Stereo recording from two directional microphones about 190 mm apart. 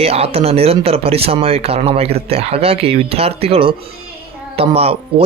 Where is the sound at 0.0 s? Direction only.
30° right (ahead or behind).